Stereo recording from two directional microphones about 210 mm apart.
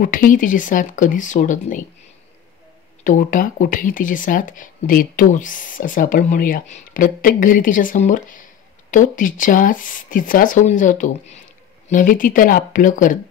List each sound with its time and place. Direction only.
0.0 s speech: 40° left (ahead or behind)
3.0 s speech: 40° left (ahead or behind)